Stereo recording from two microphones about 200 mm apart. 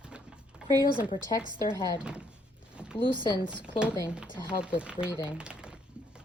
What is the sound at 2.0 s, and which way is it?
Speech, 5° right (ahead or behind).